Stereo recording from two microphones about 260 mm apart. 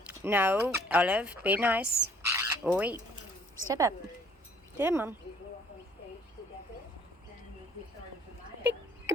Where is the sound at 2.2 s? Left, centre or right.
Centre.